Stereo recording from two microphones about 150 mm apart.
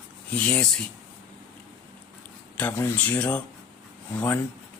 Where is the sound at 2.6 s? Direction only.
15° left (ahead or behind).